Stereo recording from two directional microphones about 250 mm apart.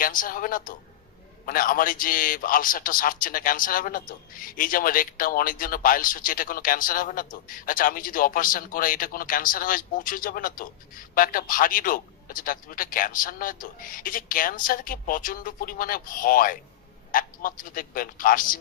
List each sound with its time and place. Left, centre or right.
0.0 s speech: left